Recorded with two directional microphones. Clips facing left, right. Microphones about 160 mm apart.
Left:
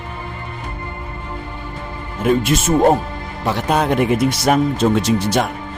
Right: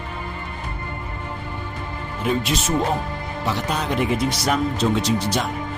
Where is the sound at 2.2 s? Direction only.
50° left (ahead or behind).